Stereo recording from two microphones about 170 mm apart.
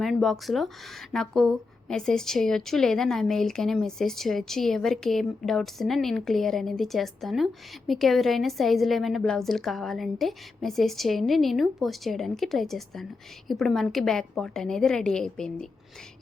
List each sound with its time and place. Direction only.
0.0 s a woman's voice: centre (ahead or behind)